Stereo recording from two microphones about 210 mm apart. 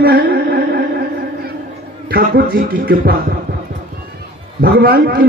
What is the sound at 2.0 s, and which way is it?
A man's voice, 45° right (ahead or behind).